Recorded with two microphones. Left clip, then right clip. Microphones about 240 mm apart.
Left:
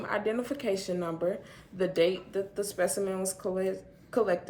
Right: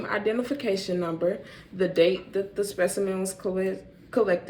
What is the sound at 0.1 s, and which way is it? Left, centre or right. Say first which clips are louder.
Speech: right 4 dB; left.